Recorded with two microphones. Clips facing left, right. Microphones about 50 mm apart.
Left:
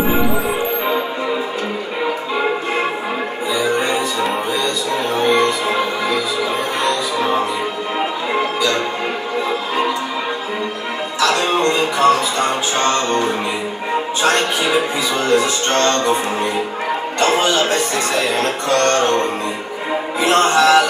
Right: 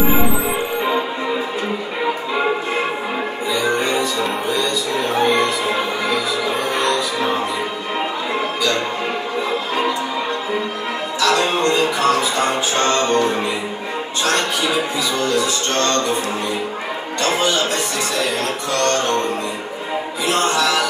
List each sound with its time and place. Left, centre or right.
0.1 s music: centre
3.5 s music: centre
11.1 s music: centre
14.2 s music: left
17.2 s music: left
20.2 s music: left